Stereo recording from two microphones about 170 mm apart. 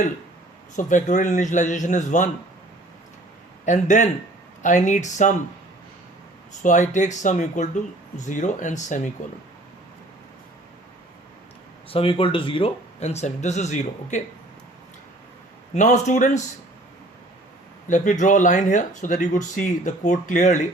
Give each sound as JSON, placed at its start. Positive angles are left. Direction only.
{"t": 0.8, "sound": "speech", "side_deg": 50}
{"t": 3.7, "sound": "speech", "side_deg": 45}
{"t": 6.6, "sound": "speech", "side_deg": 45}
{"t": 11.9, "sound": "speech", "side_deg": 35}
{"t": 15.7, "sound": "speech", "side_deg": 45}
{"t": 17.8, "sound": "speech", "side_deg": 50}